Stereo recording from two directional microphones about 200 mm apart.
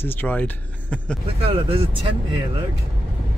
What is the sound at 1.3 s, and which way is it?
Speech, 30° right (ahead or behind).